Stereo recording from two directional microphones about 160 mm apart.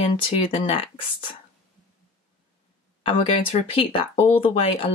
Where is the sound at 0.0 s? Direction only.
40° left (ahead or behind).